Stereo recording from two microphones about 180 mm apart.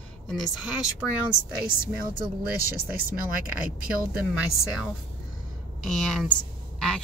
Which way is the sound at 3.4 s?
50° right (ahead or behind).